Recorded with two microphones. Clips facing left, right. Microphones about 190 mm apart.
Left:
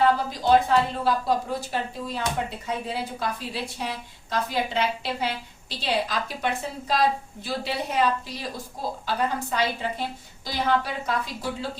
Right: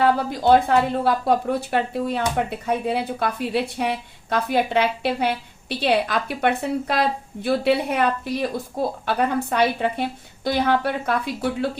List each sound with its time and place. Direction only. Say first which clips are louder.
0.0 s speech: right 3 dB; 60° right (ahead or behind)